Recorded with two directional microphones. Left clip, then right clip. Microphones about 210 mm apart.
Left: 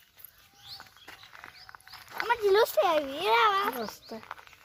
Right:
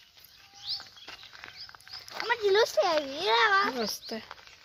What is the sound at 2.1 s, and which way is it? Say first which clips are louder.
Speech: left 1 dB; 35° left (ahead or behind).